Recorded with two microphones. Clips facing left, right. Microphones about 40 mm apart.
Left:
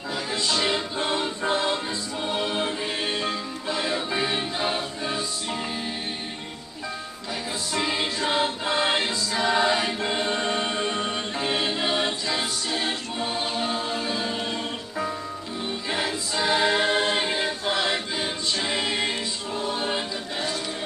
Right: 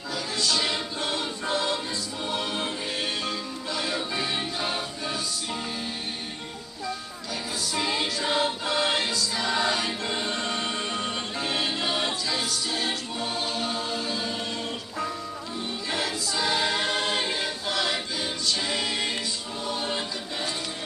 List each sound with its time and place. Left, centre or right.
0.1 s music: centre
0.9 s choir: left
2.2 s music: centre
7.7 s music: centre
8.6 s choir: centre
15.9 s choir: centre